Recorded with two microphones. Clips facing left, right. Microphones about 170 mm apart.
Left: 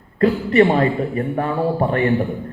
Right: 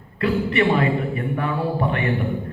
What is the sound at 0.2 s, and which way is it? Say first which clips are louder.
A man's voice: left 6 dB; 40° left (ahead or behind).